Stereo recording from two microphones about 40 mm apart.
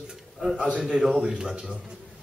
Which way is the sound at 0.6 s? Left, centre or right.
Right.